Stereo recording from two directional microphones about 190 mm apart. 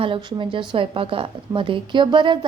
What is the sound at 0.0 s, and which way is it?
A woman's voice, 25° right (ahead or behind).